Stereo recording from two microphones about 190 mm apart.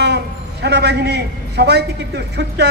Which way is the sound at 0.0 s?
60° right (ahead or behind).